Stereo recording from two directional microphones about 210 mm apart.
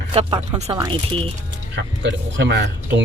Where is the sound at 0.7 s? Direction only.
20° right (ahead or behind).